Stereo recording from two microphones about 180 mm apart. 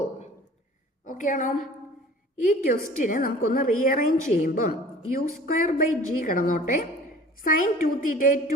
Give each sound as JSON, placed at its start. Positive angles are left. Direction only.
{"t": 1.0, "sound": "a woman's voice", "side_deg": 45}